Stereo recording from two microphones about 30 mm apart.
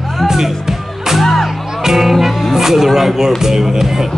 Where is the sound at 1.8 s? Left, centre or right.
Centre.